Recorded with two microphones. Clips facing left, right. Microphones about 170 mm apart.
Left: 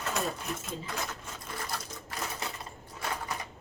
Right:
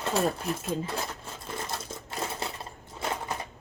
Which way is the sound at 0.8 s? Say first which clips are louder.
Right 3 dB; 30° right (ahead or behind).